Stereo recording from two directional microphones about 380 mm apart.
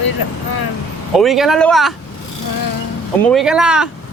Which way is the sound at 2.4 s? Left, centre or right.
Left.